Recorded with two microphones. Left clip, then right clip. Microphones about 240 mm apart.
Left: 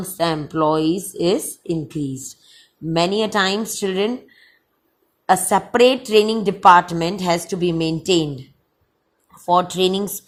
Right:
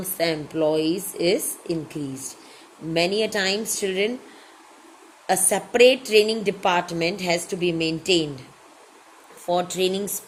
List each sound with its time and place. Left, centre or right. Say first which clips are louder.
0.2 s speech: left 4 dB; left
5.2 s a woman's voice: left 6 dB; left
9.5 s speech: left 6 dB; left